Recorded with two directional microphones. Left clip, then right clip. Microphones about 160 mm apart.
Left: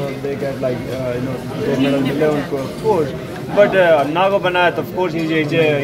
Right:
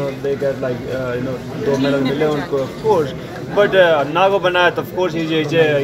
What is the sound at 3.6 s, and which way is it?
Speech, 15° right (ahead or behind).